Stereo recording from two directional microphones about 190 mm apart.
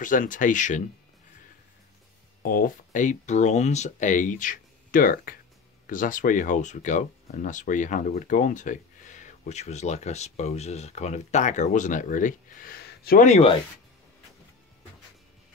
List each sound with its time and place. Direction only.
0.0 s speech: 45° left (ahead or behind)
2.4 s speech: 50° left (ahead or behind)
13.3 s speech: 30° left (ahead or behind)